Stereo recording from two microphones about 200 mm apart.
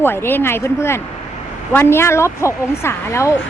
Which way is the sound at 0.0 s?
10° left (ahead or behind).